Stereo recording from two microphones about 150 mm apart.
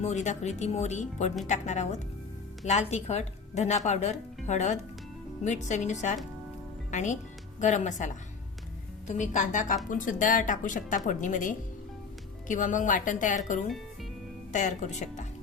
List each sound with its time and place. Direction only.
0.0 s a woman's voice: 50° left (ahead or behind)